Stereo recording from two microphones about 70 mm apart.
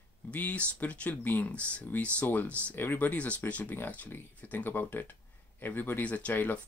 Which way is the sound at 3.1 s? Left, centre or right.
Centre.